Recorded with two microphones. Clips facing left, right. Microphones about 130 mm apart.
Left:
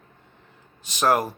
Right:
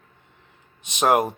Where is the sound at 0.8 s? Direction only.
20° right (ahead or behind).